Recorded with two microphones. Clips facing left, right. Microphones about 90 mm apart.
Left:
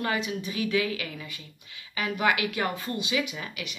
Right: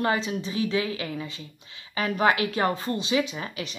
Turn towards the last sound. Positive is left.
turn(degrees=-35)  # may be behind; listen again after turning